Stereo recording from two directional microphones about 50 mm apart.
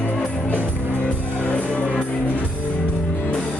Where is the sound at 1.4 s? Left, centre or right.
Left.